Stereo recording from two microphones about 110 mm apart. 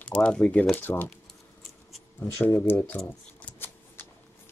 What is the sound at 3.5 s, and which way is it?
Shuffling cards, 20° left (ahead or behind).